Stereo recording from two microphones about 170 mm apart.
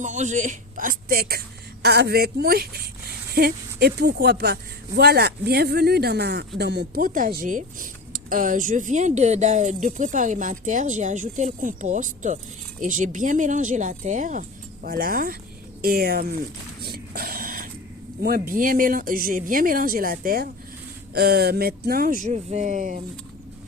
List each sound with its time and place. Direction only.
0.0 s speech: 45° right (ahead or behind); by 1.4 s 60° right (ahead or behind)
1.8 s speech: 70° right (ahead or behind); by 14.4 s 50° right (ahead or behind)
14.8 s a woman's voice: 60° right (ahead or behind)
16.8 s a sound: 65° right (ahead or behind)
18.2 s a woman's voice: 60° right (ahead or behind); by 23.0 s 45° right (ahead or behind)